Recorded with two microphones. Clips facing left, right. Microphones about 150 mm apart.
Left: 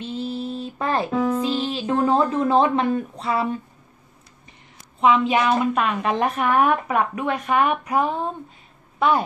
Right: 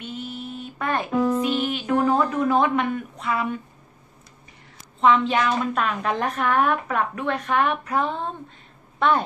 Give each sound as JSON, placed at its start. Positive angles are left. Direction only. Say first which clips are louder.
{"t": 0.0, "sound": "a sound", "louder": "left 6 dB", "side_deg": 30}
{"t": 1.4, "sound": "speech", "louder": "even", "side_deg": 30}
{"t": 5.0, "sound": "a woman's voice", "louder": "left 1 dB", "side_deg": 10}